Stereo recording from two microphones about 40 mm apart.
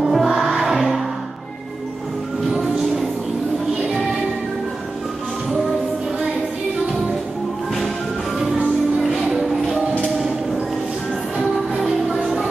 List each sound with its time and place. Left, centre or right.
0.0 s music: centre
2.5 s music: centre
9.3 s music: centre
11.3 s music: centre